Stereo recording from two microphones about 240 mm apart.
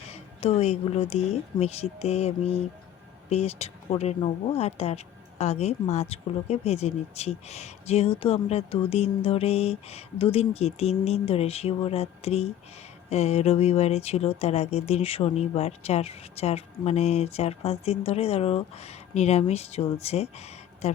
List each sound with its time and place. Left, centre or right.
0.1 s speech: left